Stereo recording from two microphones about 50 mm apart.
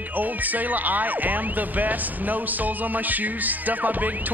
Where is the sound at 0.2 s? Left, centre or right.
Right.